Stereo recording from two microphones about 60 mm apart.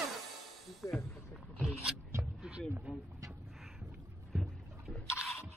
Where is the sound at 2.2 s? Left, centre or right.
Centre.